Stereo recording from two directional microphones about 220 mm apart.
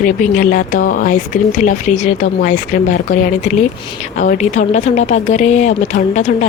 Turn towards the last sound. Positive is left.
turn(degrees=30)  # may be behind; listen again after turning